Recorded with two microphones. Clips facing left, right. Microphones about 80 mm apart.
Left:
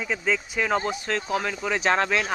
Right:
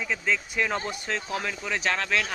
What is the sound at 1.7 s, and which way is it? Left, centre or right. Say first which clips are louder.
Speech: left 5 dB; left.